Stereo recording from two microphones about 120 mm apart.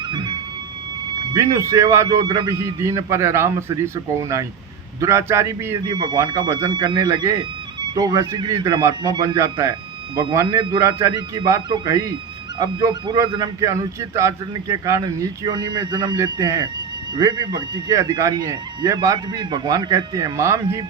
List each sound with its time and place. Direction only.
0.0 s music: 40° right (ahead or behind)
1.1 s a sound: 40° right (ahead or behind)
1.5 s a man's voice: 25° right (ahead or behind)
2.2 s speech: 40° right (ahead or behind)
2.6 s a man's voice: 25° right (ahead or behind)
5.9 s speech: 40° right (ahead or behind)
10.8 s a man's voice: 25° right (ahead or behind)
12.5 s speech: 40° right (ahead or behind)
13.4 s a man's voice: 25° right (ahead or behind)